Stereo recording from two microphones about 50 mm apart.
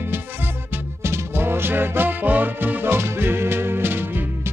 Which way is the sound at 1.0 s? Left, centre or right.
Right.